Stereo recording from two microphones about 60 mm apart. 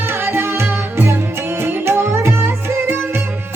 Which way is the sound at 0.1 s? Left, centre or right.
Right.